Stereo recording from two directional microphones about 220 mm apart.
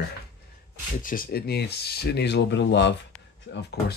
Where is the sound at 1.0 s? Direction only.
40° left (ahead or behind).